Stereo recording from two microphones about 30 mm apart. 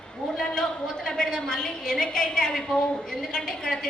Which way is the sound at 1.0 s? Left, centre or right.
Left.